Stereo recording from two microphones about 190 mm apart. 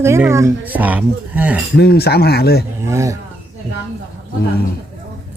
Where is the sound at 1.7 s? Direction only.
55° left (ahead or behind).